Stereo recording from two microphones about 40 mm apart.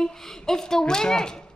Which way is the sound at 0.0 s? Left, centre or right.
Centre.